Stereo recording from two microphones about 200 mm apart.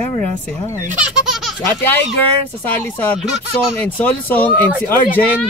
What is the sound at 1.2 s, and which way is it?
Baby laughter, centre (ahead or behind).